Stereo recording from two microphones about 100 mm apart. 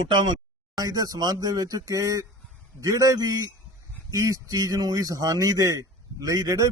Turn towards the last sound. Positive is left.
turn(degrees=-35)  # may be behind; listen again after turning